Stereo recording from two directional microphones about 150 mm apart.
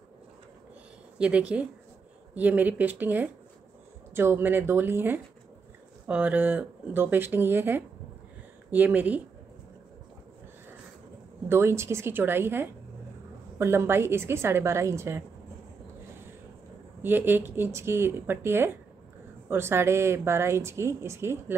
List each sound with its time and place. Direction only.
1.1 s speech: 5° right (ahead or behind)
11.4 s speech: 15° right (ahead or behind)
17.0 s speech: 15° right (ahead or behind)